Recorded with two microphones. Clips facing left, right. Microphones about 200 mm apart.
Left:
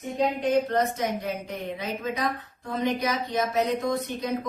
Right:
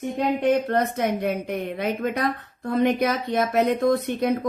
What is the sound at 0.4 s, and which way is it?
A woman's voice, 60° right (ahead or behind).